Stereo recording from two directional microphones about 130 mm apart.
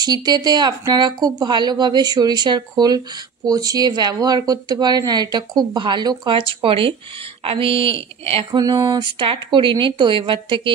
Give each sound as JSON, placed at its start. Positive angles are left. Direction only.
{"t": 0.0, "sound": "a woman's voice", "side_deg": -35}
{"t": 8.5, "sound": "speech", "side_deg": -30}